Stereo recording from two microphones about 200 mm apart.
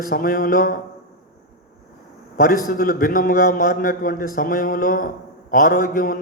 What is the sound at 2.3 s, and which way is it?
A man's voice, 45° left (ahead or behind).